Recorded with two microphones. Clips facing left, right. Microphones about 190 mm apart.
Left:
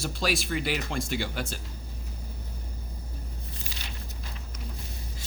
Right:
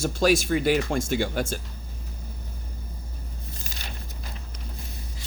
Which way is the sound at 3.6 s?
45° right (ahead or behind).